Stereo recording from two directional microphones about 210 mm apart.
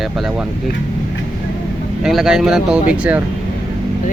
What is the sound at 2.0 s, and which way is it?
Speech, centre (ahead or behind).